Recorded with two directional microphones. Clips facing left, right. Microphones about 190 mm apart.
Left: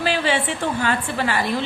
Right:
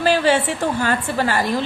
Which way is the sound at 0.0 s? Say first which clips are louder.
Right 5 dB; 45° right (ahead or behind).